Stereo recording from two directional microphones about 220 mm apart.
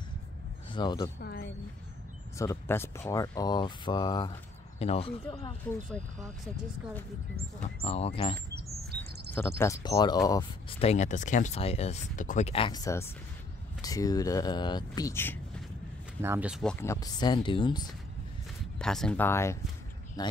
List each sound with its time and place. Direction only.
0.7 s speech: 20° left (ahead or behind)
1.2 s speech: 45° left (ahead or behind)
2.3 s speech: 15° left (ahead or behind)
5.7 s speech: 5° left (ahead or behind)
7.6 s speech: 25° left (ahead or behind)
9.6 s speech: 15° left (ahead or behind)
10.9 s speech: 30° left (ahead or behind); by 15.3 s 10° left (ahead or behind)
16.2 s speech: 10° right (ahead or behind)
16.7 s speech: 10° left (ahead or behind)
18.8 s speech: 5° left (ahead or behind); by 20.3 s 20° left (ahead or behind)